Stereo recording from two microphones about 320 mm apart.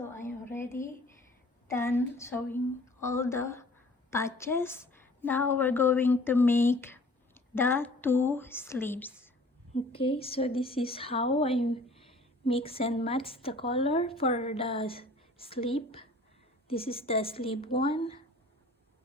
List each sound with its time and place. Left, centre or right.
0.0 s a sound: centre
1.6 s a woman's voice: centre
9.7 s speech: centre